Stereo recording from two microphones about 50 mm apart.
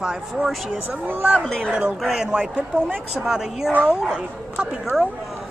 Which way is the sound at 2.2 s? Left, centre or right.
Centre.